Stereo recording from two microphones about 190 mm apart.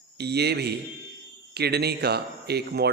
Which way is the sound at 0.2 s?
60° right (ahead or behind).